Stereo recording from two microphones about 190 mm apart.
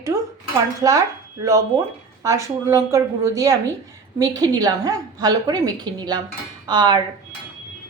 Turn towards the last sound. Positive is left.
turn(degrees=-20)  # may be behind; listen again after turning